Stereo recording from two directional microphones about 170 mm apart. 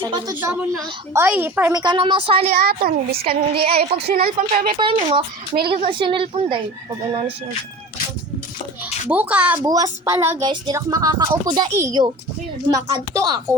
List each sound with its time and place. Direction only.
0.0 s speech: 25° right (ahead or behind)
0.3 s a woman's voice: 10° right (ahead or behind)
1.7 s speech: 25° right (ahead or behind)
2.6 s a woman's voice: 65° right (ahead or behind)
3.8 s a woman's voice: 35° right (ahead or behind)
4.0 s speech: 55° right (ahead or behind)
4.8 s a woman's voice: 30° right (ahead or behind)
9.0 s a woman's voice: 10° right (ahead or behind)
9.6 s speech: 20° right (ahead or behind)